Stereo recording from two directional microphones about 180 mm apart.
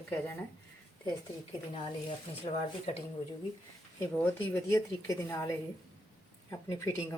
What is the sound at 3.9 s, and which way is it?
A woman's voice, 10° left (ahead or behind).